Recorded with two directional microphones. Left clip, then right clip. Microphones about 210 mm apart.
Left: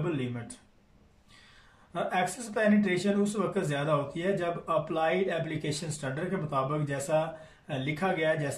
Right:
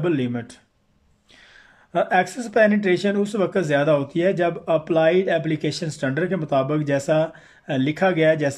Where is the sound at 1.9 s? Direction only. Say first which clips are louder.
Right 10 dB; 45° right (ahead or behind).